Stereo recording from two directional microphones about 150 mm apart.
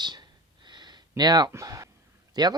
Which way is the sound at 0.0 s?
30° right (ahead or behind).